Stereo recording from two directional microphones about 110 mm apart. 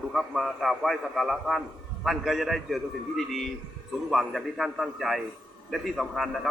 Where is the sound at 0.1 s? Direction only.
Centre (ahead or behind).